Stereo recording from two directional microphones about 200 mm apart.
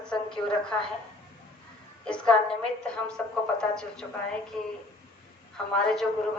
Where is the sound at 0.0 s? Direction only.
5° left (ahead or behind).